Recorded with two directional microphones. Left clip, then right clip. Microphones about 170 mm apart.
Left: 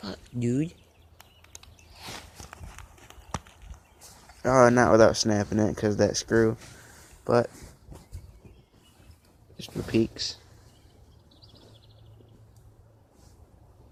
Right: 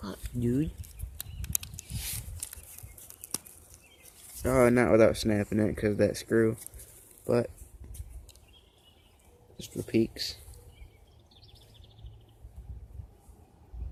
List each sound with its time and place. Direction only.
0.0 s a sound: centre (ahead or behind)
4.4 s speech: centre (ahead or behind)
9.6 s speech: 15° left (ahead or behind)